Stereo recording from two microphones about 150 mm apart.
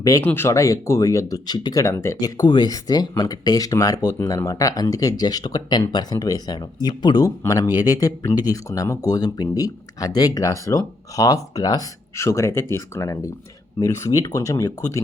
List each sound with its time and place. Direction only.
0.0 s speech: 20° left (ahead or behind)
2.4 s speech: 30° left (ahead or behind)